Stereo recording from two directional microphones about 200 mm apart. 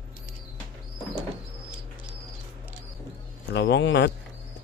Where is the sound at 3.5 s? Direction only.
60° left (ahead or behind).